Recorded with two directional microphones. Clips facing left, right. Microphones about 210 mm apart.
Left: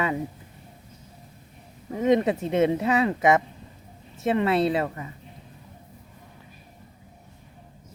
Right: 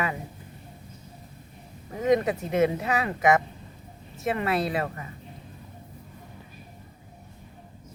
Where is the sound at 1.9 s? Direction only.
25° left (ahead or behind).